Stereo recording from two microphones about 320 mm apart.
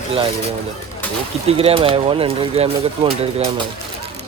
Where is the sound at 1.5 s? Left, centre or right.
Centre.